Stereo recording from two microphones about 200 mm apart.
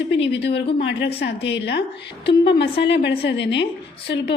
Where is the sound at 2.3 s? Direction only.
25° left (ahead or behind).